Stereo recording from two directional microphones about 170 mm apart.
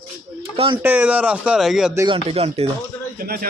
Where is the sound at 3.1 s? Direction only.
60° right (ahead or behind).